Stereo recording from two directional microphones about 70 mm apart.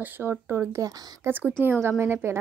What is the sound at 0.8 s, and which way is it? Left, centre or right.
Speech, right.